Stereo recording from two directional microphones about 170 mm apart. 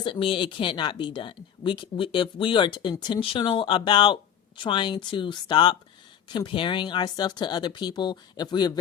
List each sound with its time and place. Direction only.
0.0 s speech: 30° left (ahead or behind)